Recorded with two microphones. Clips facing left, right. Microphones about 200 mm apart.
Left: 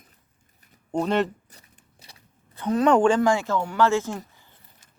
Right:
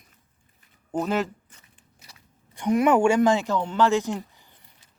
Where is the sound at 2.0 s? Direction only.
30° left (ahead or behind).